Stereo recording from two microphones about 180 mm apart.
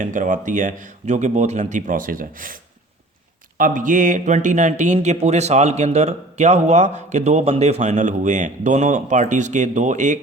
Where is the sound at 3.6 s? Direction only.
45° right (ahead or behind).